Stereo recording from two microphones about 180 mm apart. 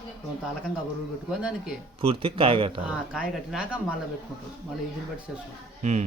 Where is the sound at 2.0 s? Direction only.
30° right (ahead or behind).